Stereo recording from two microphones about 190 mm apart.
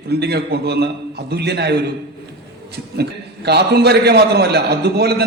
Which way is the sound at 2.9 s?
60° right (ahead or behind).